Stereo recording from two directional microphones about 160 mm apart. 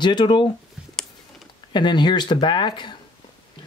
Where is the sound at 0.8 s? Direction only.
5° right (ahead or behind).